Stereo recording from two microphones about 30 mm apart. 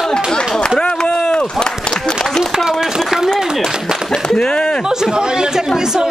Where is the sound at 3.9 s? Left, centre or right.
Right.